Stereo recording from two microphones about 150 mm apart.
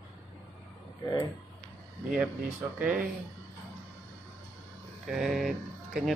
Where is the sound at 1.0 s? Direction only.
20° left (ahead or behind).